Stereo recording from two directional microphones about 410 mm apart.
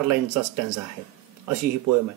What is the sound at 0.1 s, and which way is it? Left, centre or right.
Speech, right.